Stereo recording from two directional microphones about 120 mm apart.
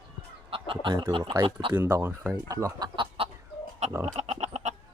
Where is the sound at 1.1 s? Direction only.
45° right (ahead or behind).